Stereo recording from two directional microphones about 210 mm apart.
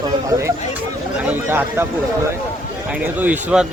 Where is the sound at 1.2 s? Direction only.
10° right (ahead or behind).